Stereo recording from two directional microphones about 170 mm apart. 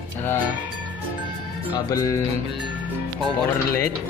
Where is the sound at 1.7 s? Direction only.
20° left (ahead or behind).